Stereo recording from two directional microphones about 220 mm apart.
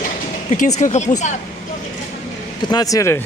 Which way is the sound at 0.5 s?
35° left (ahead or behind).